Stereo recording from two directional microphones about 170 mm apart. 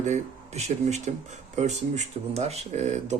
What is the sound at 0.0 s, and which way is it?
Speech, 40° right (ahead or behind).